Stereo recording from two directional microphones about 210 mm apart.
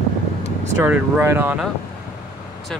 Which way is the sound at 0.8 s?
10° right (ahead or behind).